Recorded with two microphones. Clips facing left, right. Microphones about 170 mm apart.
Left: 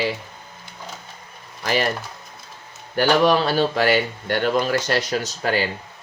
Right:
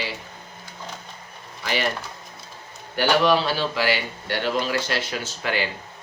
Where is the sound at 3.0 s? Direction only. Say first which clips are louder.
Left 2 dB; 45° left (ahead or behind).